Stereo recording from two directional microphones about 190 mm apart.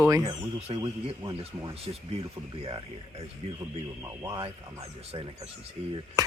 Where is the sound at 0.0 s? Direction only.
15° right (ahead or behind).